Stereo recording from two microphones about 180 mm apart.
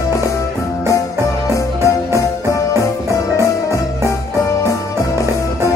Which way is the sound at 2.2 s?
15° left (ahead or behind).